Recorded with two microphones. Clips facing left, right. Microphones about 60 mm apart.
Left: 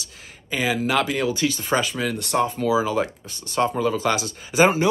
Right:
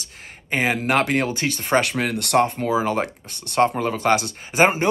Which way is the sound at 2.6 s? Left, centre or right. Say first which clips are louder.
Even; right.